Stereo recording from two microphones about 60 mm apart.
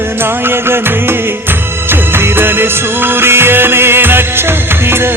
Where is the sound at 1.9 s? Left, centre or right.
Right.